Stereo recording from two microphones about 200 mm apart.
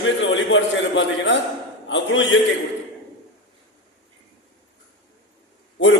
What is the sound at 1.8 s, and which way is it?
Mantra, 70° left (ahead or behind).